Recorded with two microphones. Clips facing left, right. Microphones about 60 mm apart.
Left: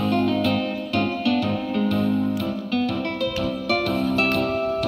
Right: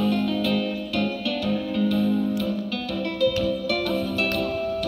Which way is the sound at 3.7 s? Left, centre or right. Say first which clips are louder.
Left 3 dB; left.